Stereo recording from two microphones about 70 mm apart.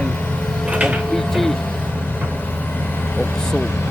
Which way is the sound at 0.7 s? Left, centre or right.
Centre.